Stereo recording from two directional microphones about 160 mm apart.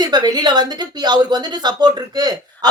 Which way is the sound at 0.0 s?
25° right (ahead or behind).